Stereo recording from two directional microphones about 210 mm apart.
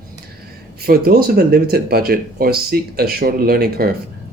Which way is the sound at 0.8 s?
45° right (ahead or behind).